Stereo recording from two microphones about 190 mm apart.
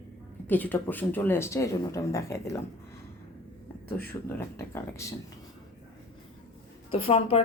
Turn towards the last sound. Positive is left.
turn(degrees=30)  # may be behind; listen again after turning